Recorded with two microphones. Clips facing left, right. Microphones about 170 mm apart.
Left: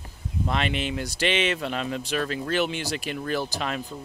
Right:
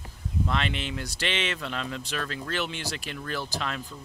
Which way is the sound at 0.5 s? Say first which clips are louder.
Left 5 dB; 10° left (ahead or behind).